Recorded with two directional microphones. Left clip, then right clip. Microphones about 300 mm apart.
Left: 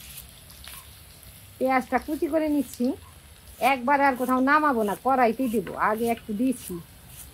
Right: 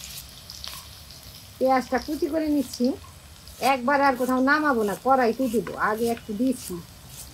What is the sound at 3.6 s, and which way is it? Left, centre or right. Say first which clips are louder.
Speech: even; centre.